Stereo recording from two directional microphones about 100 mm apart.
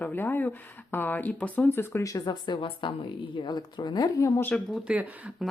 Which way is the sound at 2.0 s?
35° left (ahead or behind).